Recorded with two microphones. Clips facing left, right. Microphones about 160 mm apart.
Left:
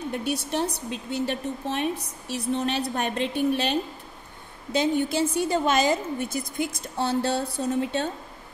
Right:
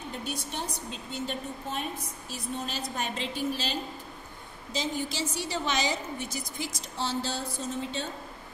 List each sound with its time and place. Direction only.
0.2 s a woman's voice: 65° left (ahead or behind)